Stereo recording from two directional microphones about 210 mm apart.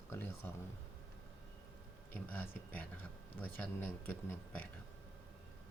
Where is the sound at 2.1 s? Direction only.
10° left (ahead or behind).